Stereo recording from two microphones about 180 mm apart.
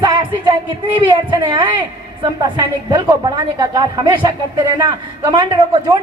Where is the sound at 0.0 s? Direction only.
25° right (ahead or behind).